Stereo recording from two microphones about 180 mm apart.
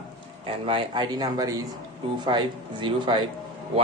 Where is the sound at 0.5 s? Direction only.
30° right (ahead or behind).